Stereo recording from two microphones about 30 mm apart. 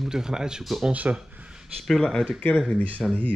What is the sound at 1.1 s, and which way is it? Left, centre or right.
Speech, right.